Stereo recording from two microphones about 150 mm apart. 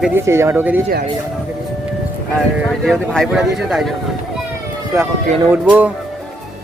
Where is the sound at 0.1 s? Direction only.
15° right (ahead or behind).